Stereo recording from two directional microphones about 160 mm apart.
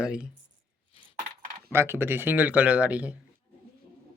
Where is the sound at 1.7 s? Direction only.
15° right (ahead or behind).